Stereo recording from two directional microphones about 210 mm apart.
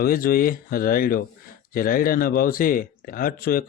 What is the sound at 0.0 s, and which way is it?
A man's voice, 45° left (ahead or behind).